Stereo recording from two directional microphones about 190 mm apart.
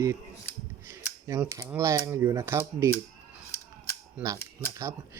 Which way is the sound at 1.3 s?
15° right (ahead or behind).